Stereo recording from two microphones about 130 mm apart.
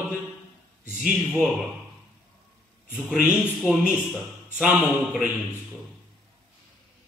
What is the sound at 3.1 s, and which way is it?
Speech, centre (ahead or behind).